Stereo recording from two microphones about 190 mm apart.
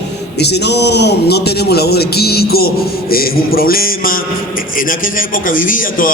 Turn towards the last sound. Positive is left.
turn(degrees=45)  # may be behind; listen again after turning